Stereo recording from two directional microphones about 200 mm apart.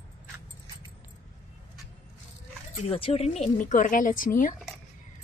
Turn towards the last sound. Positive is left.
turn(degrees=45)  # may be behind; listen again after turning